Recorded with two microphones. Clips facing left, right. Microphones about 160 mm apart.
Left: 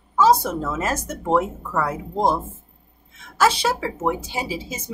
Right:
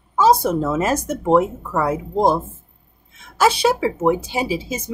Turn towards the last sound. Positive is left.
turn(degrees=-15)  # may be behind; listen again after turning